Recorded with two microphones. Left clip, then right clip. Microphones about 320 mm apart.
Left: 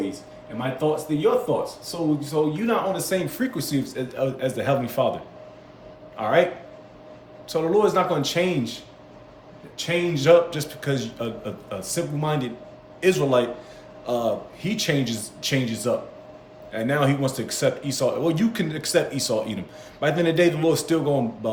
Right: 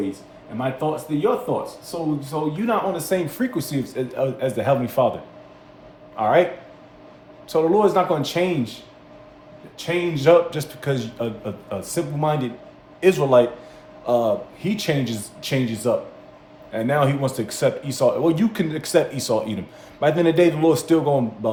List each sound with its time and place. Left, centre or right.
0.6 s speech: centre